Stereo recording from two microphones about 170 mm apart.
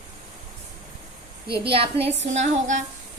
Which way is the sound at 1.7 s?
35° right (ahead or behind).